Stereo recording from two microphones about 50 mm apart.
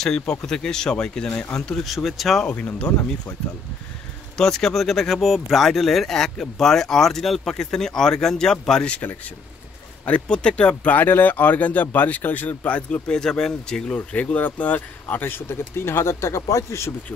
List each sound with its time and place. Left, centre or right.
0.3 s speech: centre
1.9 s speech: centre
2.4 s speech: left
4.4 s speech: centre
10.2 s speech: centre
13.1 s speech: centre
13.9 s speech: left
15.4 s speech: left